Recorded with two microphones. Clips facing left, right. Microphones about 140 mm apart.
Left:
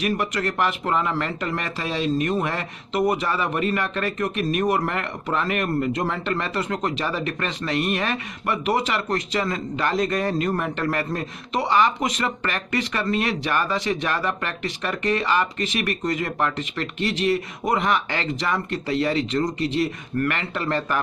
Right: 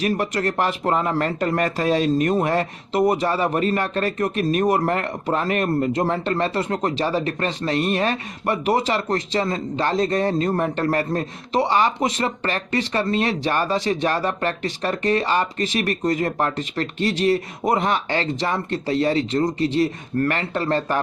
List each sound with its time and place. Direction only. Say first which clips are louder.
0.0 s speech: right 2 dB; 35° right (ahead or behind)